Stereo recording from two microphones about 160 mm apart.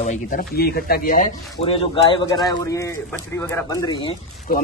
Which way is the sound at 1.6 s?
35° left (ahead or behind).